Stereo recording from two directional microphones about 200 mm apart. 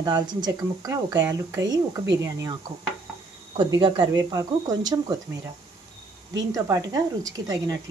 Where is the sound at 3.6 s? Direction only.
25° right (ahead or behind).